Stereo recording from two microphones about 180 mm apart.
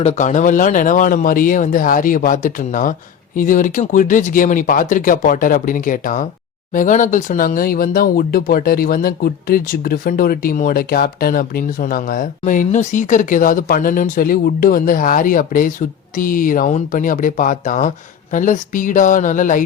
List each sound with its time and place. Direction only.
0.0 s speech: 40° left (ahead or behind)